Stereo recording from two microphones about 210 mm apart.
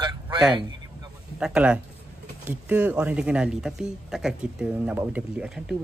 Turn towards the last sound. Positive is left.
turn(degrees=-5)  # may be behind; listen again after turning